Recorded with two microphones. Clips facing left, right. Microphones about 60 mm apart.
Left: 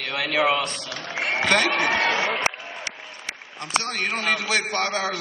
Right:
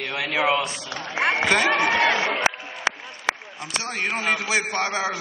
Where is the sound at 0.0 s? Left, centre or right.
Centre.